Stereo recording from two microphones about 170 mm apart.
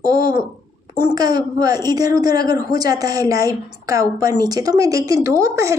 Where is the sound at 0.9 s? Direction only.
25° right (ahead or behind).